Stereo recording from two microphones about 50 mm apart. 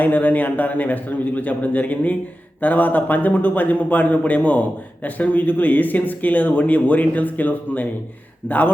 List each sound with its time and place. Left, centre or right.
0.0 s speech: left